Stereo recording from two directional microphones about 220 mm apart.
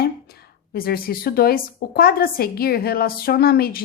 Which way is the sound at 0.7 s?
45° left (ahead or behind).